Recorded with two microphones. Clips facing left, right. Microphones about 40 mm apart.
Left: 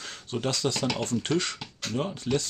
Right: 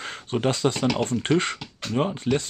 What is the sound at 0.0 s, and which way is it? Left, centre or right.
Speech, right.